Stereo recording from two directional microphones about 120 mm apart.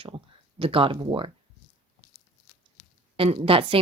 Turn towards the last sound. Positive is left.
turn(degrees=-50)  # may be behind; listen again after turning